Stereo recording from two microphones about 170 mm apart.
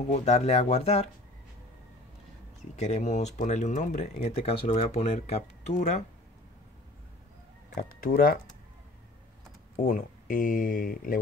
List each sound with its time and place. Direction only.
0.1 s speech: 40° left (ahead or behind)
2.7 s speech: 40° left (ahead or behind)
7.7 s speech: 55° left (ahead or behind)
9.8 s speech: 50° left (ahead or behind)